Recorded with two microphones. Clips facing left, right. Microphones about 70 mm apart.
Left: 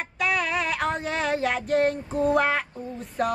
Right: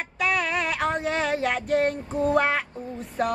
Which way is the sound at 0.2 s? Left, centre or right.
Centre.